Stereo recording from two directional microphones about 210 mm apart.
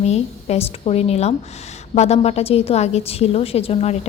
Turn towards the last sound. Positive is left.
turn(degrees=30)  # may be behind; listen again after turning